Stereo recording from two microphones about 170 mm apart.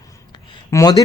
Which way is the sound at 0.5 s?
20° left (ahead or behind).